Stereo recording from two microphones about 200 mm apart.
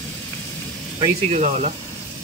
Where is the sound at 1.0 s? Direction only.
30° right (ahead or behind).